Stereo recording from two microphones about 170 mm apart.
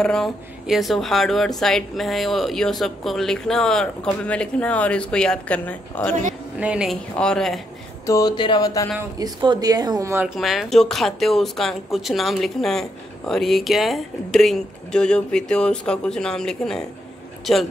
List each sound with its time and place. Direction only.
0.0 s speech: 5° left (ahead or behind)
6.6 s speech: 5° right (ahead or behind)
8.1 s speech: 20° left (ahead or behind)
9.2 s speech: 25° right (ahead or behind)
10.2 s speech: centre (ahead or behind)